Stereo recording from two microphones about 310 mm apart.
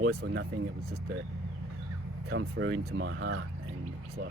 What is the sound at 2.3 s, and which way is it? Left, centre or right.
Speech, right.